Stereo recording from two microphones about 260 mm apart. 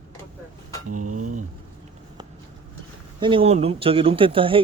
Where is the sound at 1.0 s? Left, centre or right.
Right.